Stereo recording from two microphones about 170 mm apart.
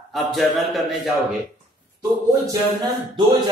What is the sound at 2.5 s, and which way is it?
Speech, 25° right (ahead or behind).